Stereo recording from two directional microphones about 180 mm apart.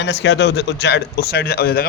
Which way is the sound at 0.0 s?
75° left (ahead or behind).